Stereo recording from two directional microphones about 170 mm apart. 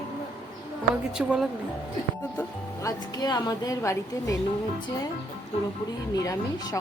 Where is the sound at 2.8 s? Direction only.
25° left (ahead or behind).